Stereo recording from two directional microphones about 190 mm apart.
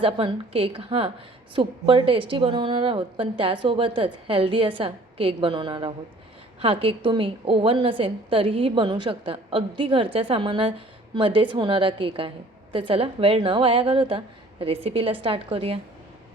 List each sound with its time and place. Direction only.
0.0 s a woman's voice: 30° right (ahead or behind)